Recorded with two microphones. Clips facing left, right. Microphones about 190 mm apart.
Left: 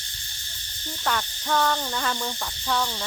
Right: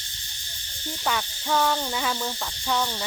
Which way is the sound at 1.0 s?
5° right (ahead or behind).